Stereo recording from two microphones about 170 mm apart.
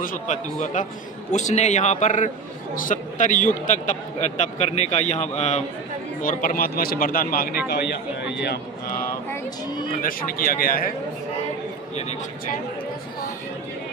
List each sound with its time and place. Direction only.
0.0 s a man's voice: 50° left (ahead or behind)
6.2 s a man's voice: 55° left (ahead or behind)
7.7 s speech: 85° left
10.0 s a man's voice: 55° left (ahead or behind)